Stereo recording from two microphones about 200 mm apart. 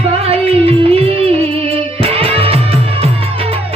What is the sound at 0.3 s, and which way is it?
Music, 30° right (ahead or behind).